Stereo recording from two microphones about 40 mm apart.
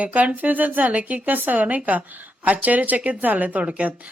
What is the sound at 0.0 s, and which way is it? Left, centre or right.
A woman's voice, right.